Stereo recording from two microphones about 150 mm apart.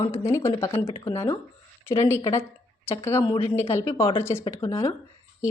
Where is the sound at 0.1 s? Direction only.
20° left (ahead or behind).